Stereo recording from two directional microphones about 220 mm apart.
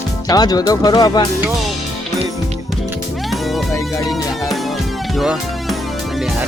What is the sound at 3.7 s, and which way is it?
Music, 15° left (ahead or behind).